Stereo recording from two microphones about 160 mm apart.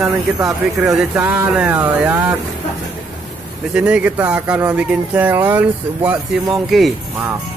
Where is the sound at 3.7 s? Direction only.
5° right (ahead or behind).